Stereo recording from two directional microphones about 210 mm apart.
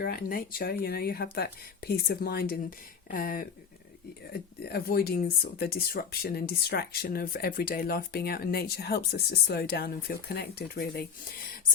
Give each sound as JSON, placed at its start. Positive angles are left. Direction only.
{"t": 0.0, "sound": "speech", "side_deg": 45}